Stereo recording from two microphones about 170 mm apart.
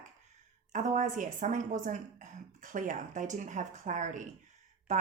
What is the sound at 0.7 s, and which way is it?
A woman's voice, 45° right (ahead or behind).